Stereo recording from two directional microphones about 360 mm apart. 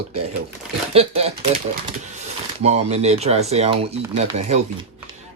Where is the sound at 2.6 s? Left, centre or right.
Centre.